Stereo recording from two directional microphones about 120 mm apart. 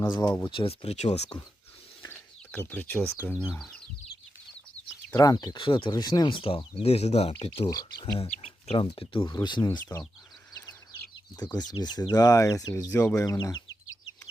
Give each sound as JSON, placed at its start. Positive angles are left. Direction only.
{"t": 0.5, "sound": "speech", "side_deg": 45}
{"t": 2.0, "sound": "speech", "side_deg": 20}
{"t": 5.1, "sound": "speech", "side_deg": 30}
{"t": 7.7, "sound": "speech", "side_deg": 35}
{"t": 8.3, "sound": "chicken", "side_deg": 60}
{"t": 8.7, "sound": "speech", "side_deg": 45}
{"t": 9.9, "sound": "speech", "side_deg": 15}
{"t": 11.7, "sound": "speech", "side_deg": 35}